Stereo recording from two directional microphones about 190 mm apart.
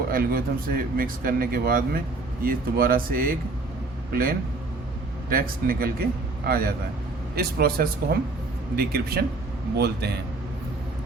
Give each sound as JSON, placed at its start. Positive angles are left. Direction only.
{"t": 0.1, "sound": "a man's voice", "side_deg": -50}